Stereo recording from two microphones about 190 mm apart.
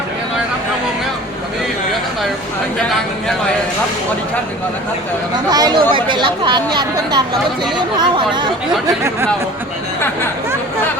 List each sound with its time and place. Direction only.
5.5 s a woman's voice: 20° right (ahead or behind)